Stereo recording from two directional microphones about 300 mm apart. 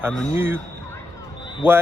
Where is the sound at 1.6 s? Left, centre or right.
Centre.